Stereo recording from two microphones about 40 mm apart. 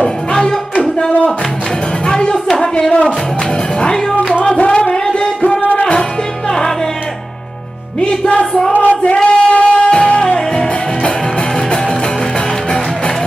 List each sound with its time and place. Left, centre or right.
0.0 s music: centre
2.0 s music: left
4.3 s music: left
5.6 s music: left
8.0 s music: left